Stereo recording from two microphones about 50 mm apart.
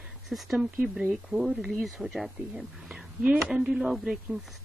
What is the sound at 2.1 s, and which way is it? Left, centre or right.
A woman's voice, centre.